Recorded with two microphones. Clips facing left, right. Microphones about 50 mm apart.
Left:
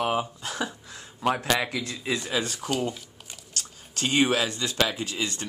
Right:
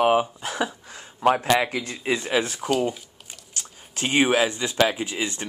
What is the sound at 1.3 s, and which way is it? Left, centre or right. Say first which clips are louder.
Speech: right 5 dB; centre.